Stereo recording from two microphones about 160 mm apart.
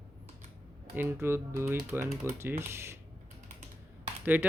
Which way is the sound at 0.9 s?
15° right (ahead or behind).